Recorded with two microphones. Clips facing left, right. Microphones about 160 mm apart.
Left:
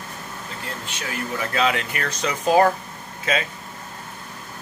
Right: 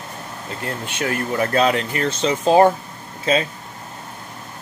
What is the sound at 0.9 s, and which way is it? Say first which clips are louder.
Speech: right 7 dB; 55° right (ahead or behind).